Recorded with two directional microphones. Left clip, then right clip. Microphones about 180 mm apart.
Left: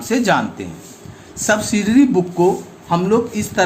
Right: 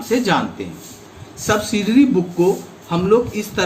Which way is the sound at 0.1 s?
65° left (ahead or behind).